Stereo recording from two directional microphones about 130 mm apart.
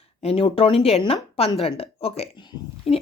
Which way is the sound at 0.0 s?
50° left (ahead or behind).